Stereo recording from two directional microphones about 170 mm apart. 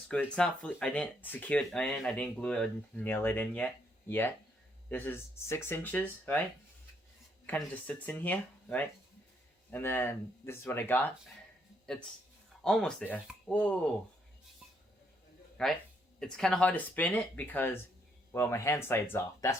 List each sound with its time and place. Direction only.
0.1 s speech: 5° left (ahead or behind)
4.9 s speech: 10° left (ahead or behind)
7.4 s speech: 10° left (ahead or behind)
12.6 s speech: 5° left (ahead or behind)
15.6 s speech: 5° left (ahead or behind)